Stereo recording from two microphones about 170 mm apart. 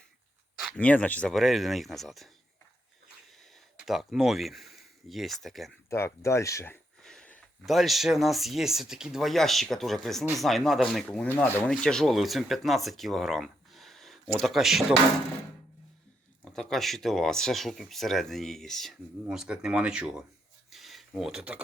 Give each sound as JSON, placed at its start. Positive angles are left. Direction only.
{"t": 0.6, "sound": "speech", "side_deg": 5}
{"t": 3.8, "sound": "speech", "side_deg": 0}
{"t": 5.9, "sound": "speech", "side_deg": 15}
{"t": 7.0, "sound": "speech", "side_deg": 5}
{"t": 16.4, "sound": "speech", "side_deg": 5}
{"t": 20.7, "sound": "a sound", "side_deg": 0}